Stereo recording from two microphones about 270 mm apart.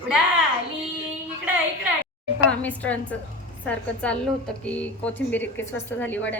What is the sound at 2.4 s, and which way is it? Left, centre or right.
A woman's voice, centre.